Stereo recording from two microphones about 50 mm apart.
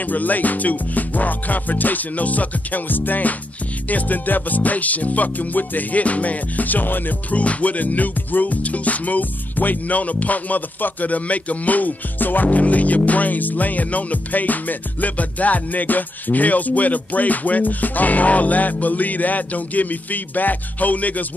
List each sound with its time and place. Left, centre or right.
0.0 s music: left